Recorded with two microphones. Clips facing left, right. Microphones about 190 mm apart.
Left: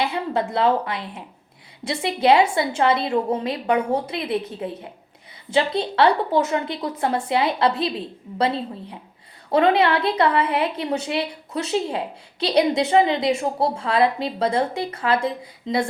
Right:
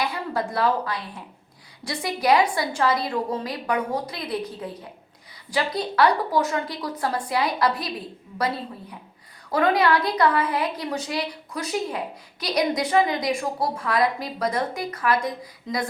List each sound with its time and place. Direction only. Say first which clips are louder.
0.0 s a woman's voice: left 3 dB; 25° left (ahead or behind)